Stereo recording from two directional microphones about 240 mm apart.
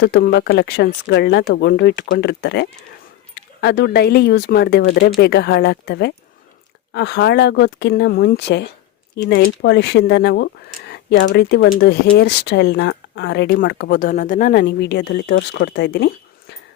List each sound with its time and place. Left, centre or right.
0.0 s speech: left